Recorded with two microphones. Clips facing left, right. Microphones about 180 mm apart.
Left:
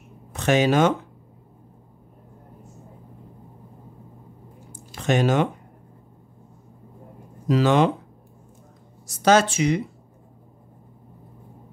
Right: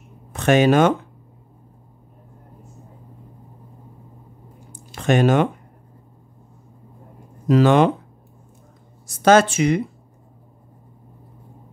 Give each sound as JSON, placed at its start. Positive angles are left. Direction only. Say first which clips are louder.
{"t": 0.3, "sound": "speech", "louder": "right 4 dB", "side_deg": -55}
{"t": 4.9, "sound": "speech", "louder": "right 4 dB", "side_deg": -55}
{"t": 7.4, "sound": "speech", "louder": "right 4 dB", "side_deg": -55}
{"t": 9.0, "sound": "speech", "louder": "right 4 dB", "side_deg": -55}